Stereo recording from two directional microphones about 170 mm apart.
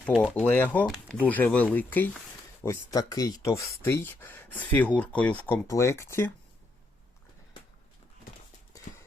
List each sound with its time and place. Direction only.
0.0 s speech: 5° left (ahead or behind)
2.6 s speech: 20° left (ahead or behind)